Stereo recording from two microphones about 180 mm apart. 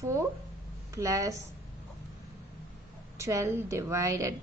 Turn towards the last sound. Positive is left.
turn(degrees=-15)  # may be behind; listen again after turning